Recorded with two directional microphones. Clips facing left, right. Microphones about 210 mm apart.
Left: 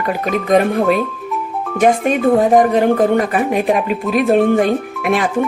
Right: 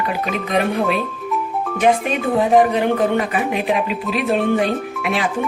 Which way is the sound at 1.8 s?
45° left (ahead or behind).